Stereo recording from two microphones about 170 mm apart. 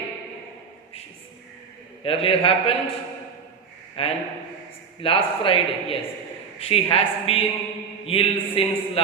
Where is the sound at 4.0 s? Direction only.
35° left (ahead or behind).